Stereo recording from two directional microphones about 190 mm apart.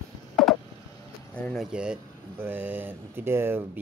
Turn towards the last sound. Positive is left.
turn(degrees=-10)  # may be behind; listen again after turning